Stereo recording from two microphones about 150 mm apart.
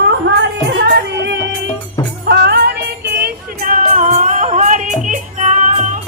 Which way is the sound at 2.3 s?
90° right.